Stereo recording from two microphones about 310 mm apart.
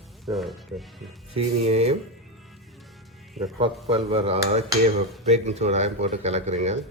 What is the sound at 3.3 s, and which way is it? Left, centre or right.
Cutlery, centre.